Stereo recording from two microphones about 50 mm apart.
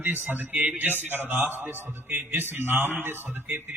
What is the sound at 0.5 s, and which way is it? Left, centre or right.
Speech, centre.